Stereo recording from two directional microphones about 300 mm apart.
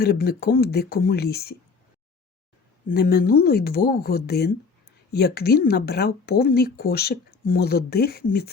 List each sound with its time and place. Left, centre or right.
0.0 s speech: left
2.9 s speech: left